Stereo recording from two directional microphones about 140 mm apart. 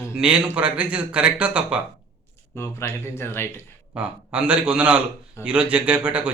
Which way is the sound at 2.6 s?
20° left (ahead or behind).